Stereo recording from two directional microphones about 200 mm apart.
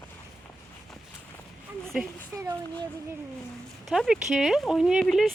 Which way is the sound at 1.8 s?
Centre (ahead or behind).